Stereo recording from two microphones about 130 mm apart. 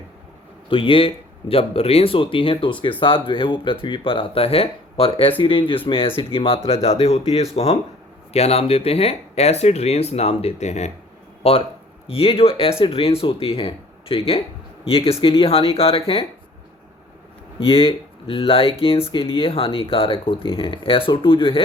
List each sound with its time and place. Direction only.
0.7 s speech: 45° left (ahead or behind); by 10.9 s 60° left (ahead or behind)
11.4 s speech: 50° left (ahead or behind)
17.6 s speech: 45° left (ahead or behind)